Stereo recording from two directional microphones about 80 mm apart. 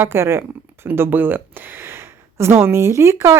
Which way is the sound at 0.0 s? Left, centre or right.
Right.